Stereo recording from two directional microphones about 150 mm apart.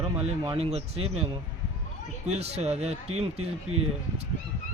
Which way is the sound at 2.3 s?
45° right (ahead or behind).